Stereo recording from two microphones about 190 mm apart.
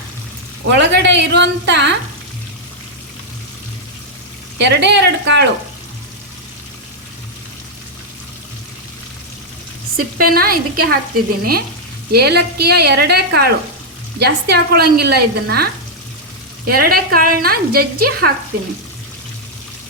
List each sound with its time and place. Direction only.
0.6 s speech: 70° right (ahead or behind)
4.5 s speech: 65° right (ahead or behind)
10.0 s speech: 50° right (ahead or behind)
12.1 s speech: 60° right (ahead or behind)